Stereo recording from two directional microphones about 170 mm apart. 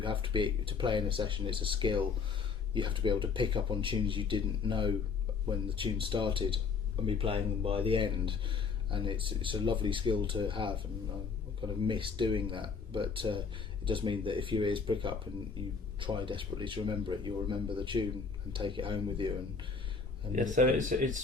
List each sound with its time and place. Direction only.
0.0 s speech: 30° right (ahead or behind)
20.3 s speech: 45° right (ahead or behind)